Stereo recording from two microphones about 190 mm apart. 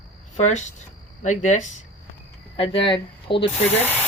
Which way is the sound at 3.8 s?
10° left (ahead or behind).